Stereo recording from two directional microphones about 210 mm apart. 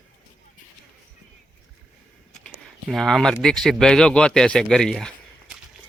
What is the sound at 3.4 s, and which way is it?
Speech, centre (ahead or behind).